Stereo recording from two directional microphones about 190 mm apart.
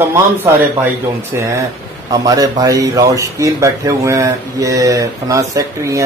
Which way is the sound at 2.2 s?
20° right (ahead or behind).